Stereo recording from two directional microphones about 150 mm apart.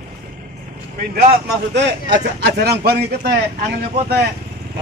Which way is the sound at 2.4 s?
90° right.